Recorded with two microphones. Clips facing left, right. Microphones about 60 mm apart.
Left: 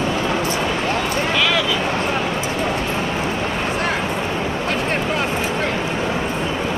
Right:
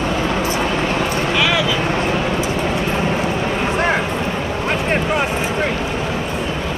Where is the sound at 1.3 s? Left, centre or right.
Centre.